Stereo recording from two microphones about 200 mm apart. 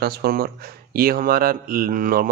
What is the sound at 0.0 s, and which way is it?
A man's voice, 50° right (ahead or behind).